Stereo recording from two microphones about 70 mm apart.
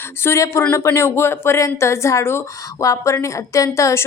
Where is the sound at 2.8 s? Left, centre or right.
Left.